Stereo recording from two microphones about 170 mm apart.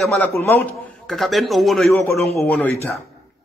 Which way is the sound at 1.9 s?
15° left (ahead or behind).